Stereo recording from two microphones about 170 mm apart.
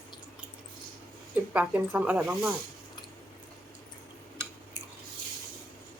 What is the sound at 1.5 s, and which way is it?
Speech, 10° right (ahead or behind).